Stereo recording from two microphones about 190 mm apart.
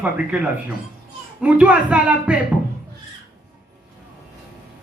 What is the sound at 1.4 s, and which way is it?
Speech, 5° right (ahead or behind).